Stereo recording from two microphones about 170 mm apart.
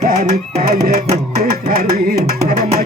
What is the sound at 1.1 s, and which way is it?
Music, 45° right (ahead or behind).